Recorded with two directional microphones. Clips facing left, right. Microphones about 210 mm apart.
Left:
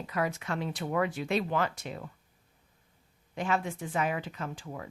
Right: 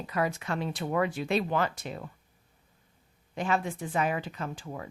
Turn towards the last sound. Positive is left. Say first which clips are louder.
# right 2 dB
turn(degrees=-35)  # may be behind; listen again after turning